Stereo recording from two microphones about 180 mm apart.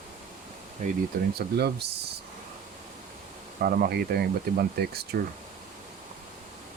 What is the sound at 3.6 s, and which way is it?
Speech, 55° right (ahead or behind).